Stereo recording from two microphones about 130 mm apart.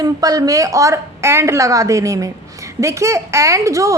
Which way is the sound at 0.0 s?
30° right (ahead or behind).